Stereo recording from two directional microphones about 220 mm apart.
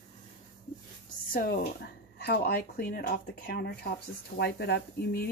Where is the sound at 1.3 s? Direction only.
40° left (ahead or behind).